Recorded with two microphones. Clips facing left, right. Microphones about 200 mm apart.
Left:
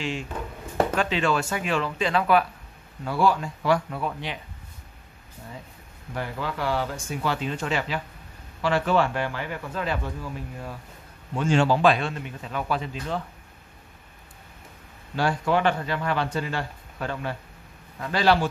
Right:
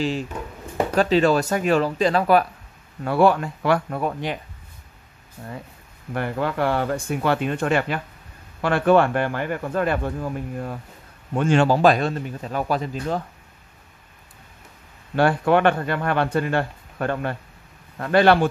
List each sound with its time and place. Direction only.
0.9 s speech: 40° right (ahead or behind)
3.0 s speech: 60° right (ahead or behind)
6.1 s speech: 55° right (ahead or behind)
11.7 s speech: 40° right (ahead or behind)
15.1 s speech: 60° right (ahead or behind)